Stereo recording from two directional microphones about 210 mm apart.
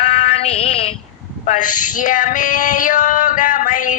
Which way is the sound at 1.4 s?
40° left (ahead or behind).